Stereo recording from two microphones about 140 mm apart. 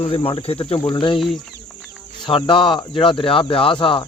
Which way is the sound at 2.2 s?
35° left (ahead or behind).